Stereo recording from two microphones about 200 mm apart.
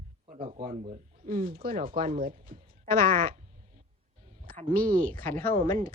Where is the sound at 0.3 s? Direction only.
30° right (ahead or behind).